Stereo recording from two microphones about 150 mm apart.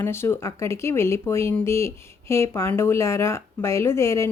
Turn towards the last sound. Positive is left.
turn(degrees=20)  # may be behind; listen again after turning